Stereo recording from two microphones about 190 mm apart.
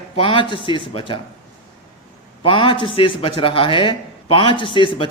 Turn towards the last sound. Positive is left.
turn(degrees=25)  # may be behind; listen again after turning